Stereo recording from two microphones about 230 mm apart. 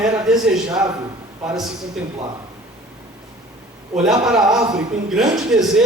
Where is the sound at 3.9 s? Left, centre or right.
Centre.